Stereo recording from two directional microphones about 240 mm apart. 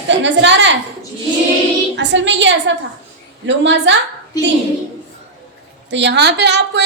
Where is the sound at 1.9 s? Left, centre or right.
Right.